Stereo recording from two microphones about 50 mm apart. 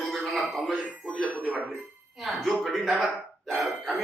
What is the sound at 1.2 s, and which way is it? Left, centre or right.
Speech, left.